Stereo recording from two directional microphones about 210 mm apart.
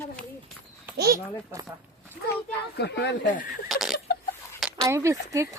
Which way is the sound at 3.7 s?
Centre (ahead or behind).